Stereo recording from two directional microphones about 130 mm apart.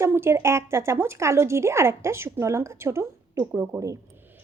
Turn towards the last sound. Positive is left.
turn(degrees=-25)  # may be behind; listen again after turning